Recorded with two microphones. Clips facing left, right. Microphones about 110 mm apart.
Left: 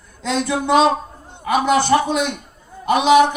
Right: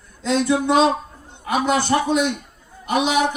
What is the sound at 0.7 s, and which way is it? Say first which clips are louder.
Speech: left 6 dB; 70° left (ahead or behind).